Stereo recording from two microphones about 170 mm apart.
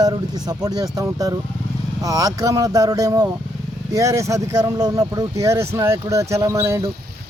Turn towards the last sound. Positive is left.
turn(degrees=-15)  # may be behind; listen again after turning